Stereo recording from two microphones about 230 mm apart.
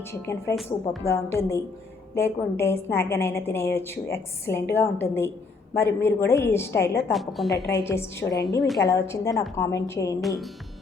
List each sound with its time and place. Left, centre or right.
0.0 s a woman's voice: centre
0.5 s a woman's voice: centre
1.0 s a woman's voice: centre
7.1 s a woman's voice: centre
7.6 s a woman's voice: centre
10.2 s a woman's voice: centre